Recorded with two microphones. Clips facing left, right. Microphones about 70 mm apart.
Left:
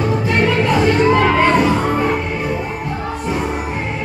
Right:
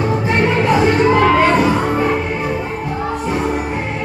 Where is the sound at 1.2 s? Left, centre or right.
Centre.